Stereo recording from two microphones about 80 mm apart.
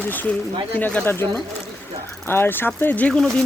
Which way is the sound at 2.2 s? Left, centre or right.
Left.